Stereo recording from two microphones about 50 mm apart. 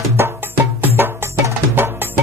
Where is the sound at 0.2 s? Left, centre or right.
Right.